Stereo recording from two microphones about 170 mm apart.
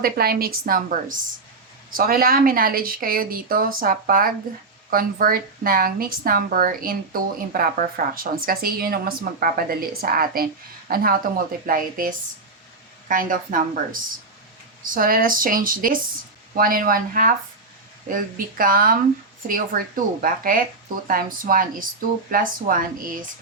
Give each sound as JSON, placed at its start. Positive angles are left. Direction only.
{"t": 0.0, "sound": "speech", "side_deg": -60}
{"t": 14.9, "sound": "speech", "side_deg": -55}